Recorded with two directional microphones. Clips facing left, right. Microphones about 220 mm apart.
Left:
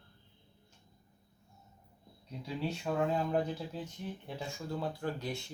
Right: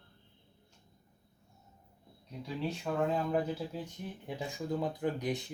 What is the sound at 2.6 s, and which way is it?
Speech, centre (ahead or behind).